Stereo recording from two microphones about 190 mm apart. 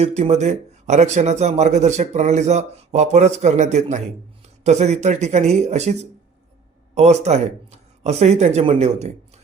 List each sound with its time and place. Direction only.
0.0 s a man's voice: 35° right (ahead or behind)